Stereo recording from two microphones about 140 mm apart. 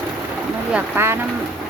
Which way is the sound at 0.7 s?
15° right (ahead or behind).